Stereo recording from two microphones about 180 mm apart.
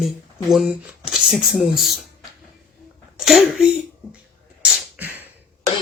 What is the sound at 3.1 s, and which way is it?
Sneeze, centre (ahead or behind).